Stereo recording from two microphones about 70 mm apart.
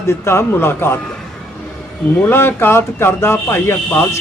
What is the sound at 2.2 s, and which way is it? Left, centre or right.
A man's voice, left.